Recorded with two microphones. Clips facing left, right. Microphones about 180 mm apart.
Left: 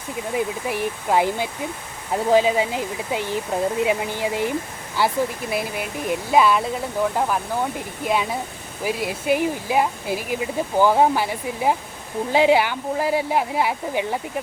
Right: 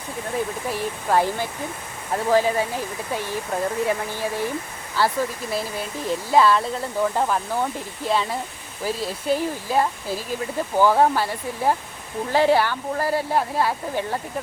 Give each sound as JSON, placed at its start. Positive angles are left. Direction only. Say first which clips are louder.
{"t": 0.3, "sound": "speech", "louder": "left 2 dB", "side_deg": 15}
{"t": 7.0, "sound": "speech", "louder": "even", "side_deg": 5}